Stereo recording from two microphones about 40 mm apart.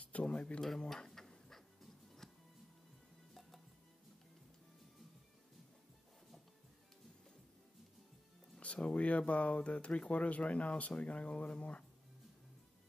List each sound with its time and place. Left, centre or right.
0.2 s speech: left
0.6 s music: centre
8.8 s speech: left